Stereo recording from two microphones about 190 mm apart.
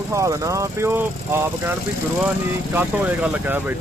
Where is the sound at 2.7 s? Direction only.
10° right (ahead or behind).